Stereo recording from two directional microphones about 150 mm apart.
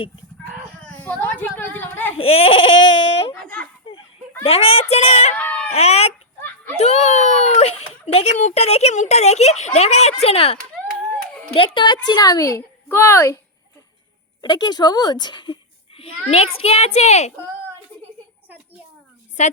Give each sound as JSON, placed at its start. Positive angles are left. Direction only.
{"t": 0.8, "sound": "speech", "side_deg": 5}
{"t": 2.1, "sound": "baby cry", "side_deg": 40}
{"t": 3.4, "sound": "a sound", "side_deg": 10}
{"t": 4.4, "sound": "a child's voice", "side_deg": 40}
{"t": 5.3, "sound": "baby cry", "side_deg": 10}
{"t": 5.7, "sound": "a child's voice", "side_deg": 45}
{"t": 14.4, "sound": "a woman's voice", "side_deg": 30}
{"t": 16.3, "sound": "a child's voice", "side_deg": 40}